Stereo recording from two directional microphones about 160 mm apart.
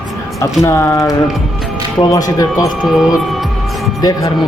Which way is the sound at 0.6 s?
20° left (ahead or behind).